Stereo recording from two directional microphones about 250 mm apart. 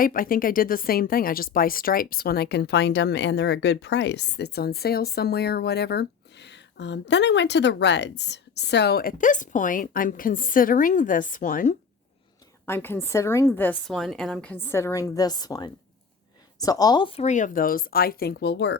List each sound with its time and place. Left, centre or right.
0.0 s speech: left
12.6 s a woman's voice: centre; by 18.8 s left